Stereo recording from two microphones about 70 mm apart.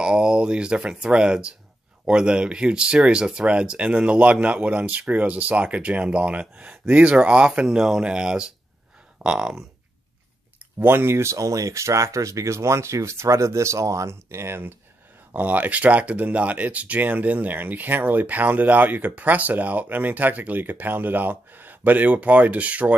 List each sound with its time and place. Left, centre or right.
0.0 s speech: centre
10.8 s speech: right
15.3 s speech: right